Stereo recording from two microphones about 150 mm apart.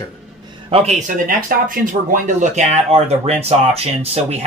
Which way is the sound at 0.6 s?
45° right (ahead or behind).